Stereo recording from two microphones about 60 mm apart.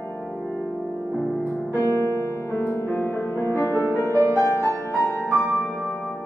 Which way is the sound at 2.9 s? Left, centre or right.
Left.